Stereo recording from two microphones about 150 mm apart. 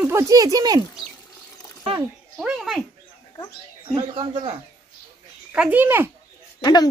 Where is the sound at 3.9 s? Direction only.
35° right (ahead or behind).